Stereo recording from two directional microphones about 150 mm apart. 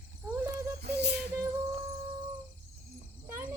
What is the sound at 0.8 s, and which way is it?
Music, 90° right.